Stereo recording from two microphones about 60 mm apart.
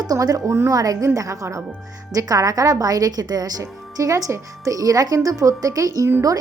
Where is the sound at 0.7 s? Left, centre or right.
Right.